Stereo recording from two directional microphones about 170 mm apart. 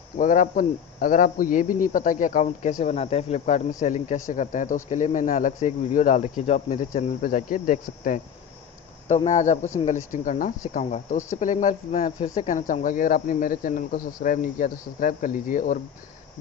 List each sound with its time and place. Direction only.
0.2 s speech: 50° left (ahead or behind)